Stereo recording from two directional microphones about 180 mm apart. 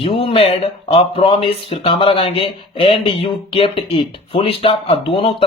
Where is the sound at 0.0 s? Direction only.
30° left (ahead or behind).